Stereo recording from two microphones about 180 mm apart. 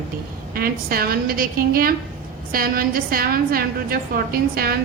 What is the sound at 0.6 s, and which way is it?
A woman's voice, 55° right (ahead or behind).